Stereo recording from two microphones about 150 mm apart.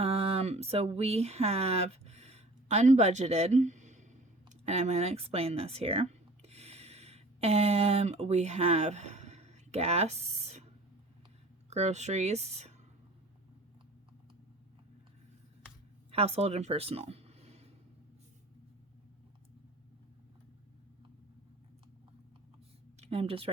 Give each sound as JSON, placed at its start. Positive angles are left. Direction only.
{"t": 0.0, "sound": "a sound", "side_deg": -40}
{"t": 4.6, "sound": "speech", "side_deg": -45}
{"t": 11.7, "sound": "speech", "side_deg": -50}
{"t": 16.1, "sound": "speech", "side_deg": -40}
{"t": 23.0, "sound": "a woman's voice", "side_deg": -40}